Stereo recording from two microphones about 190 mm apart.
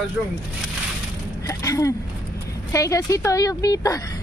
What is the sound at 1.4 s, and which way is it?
A woman's voice, 15° left (ahead or behind).